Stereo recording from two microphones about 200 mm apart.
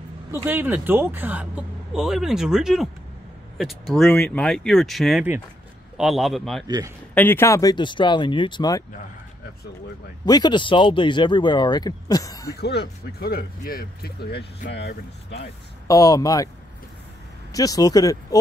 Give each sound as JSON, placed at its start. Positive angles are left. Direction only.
{"t": 0.3, "sound": "speech", "side_deg": -10}
{"t": 7.2, "sound": "speech", "side_deg": 10}
{"t": 10.2, "sound": "speech", "side_deg": 20}
{"t": 12.5, "sound": "speech", "side_deg": 55}
{"t": 15.9, "sound": "speech", "side_deg": 15}
{"t": 17.5, "sound": "speech", "side_deg": 20}